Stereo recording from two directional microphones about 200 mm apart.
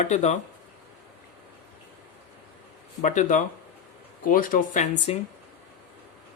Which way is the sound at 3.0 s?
35° left (ahead or behind).